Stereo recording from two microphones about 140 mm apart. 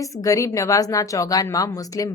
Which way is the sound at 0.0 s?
25° left (ahead or behind).